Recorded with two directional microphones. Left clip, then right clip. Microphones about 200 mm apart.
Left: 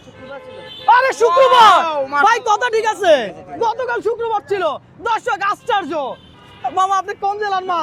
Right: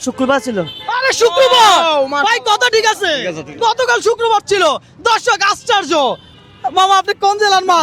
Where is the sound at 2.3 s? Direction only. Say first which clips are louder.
Right 2 dB; 10° right (ahead or behind).